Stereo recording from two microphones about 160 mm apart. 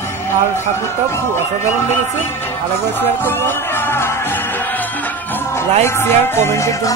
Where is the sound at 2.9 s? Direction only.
15° left (ahead or behind).